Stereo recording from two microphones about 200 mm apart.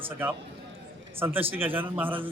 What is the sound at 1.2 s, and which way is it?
Speech, 10° right (ahead or behind).